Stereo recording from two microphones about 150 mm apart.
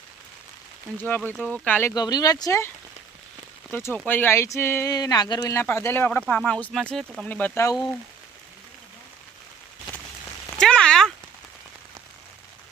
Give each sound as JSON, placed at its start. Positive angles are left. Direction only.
{"t": 0.9, "sound": "speech", "side_deg": 10}
{"t": 2.0, "sound": "speech", "side_deg": 25}
{"t": 6.1, "sound": "speech", "side_deg": 5}
{"t": 10.6, "sound": "a sound", "side_deg": 5}